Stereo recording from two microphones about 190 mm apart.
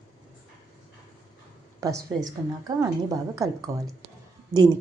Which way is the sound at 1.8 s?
20° right (ahead or behind).